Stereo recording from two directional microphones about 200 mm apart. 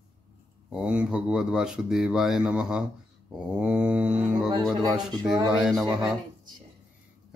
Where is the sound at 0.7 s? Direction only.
5° right (ahead or behind).